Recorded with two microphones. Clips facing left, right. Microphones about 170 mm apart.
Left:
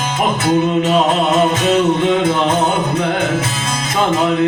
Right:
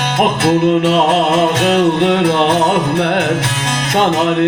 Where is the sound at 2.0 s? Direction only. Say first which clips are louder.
Right 2 dB; 75° right (ahead or behind).